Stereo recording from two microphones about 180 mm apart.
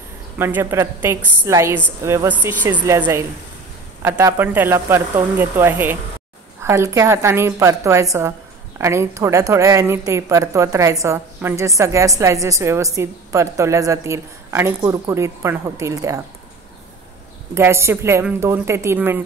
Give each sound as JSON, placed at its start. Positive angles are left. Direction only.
{"t": 0.4, "sound": "a woman's voice", "side_deg": -10}
{"t": 17.6, "sound": "a woman's voice", "side_deg": -15}